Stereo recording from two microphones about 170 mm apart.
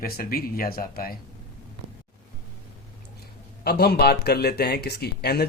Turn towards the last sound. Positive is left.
turn(degrees=70)  # may be behind; listen again after turning